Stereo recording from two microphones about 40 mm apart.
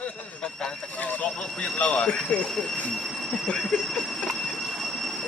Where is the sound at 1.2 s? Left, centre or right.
Left.